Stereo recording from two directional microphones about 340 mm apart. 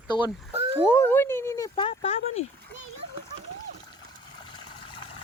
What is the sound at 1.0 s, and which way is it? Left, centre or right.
Speech, centre.